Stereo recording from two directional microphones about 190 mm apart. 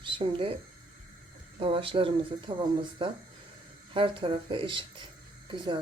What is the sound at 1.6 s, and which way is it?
Speech, 30° right (ahead or behind).